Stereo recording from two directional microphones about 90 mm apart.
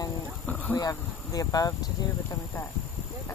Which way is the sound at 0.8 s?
40° left (ahead or behind).